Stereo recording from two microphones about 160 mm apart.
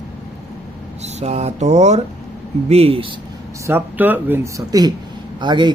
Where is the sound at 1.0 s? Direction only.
40° right (ahead or behind).